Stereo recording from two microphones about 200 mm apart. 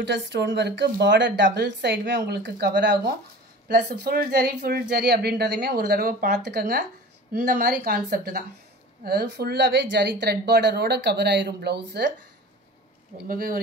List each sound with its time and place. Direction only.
0.0 s speech: 60° right (ahead or behind)
13.3 s speech: 45° right (ahead or behind)